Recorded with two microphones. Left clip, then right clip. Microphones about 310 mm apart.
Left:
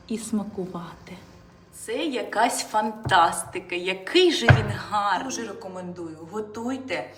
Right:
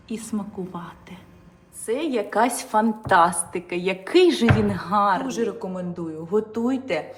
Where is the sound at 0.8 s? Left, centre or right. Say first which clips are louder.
Right 1 dB; centre.